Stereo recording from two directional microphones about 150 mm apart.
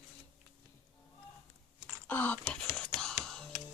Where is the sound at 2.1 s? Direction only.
10° left (ahead or behind).